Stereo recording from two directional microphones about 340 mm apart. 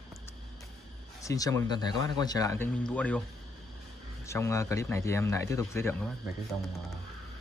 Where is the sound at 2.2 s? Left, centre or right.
Centre.